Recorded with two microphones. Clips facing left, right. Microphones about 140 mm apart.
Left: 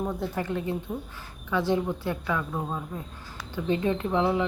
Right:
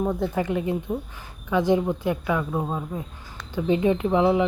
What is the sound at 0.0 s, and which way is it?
Speech, 15° right (ahead or behind).